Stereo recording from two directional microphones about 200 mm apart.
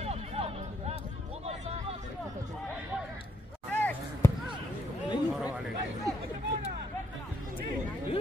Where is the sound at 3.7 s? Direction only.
10° left (ahead or behind).